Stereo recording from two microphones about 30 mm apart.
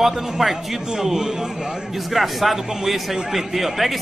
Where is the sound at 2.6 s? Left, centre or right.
Centre.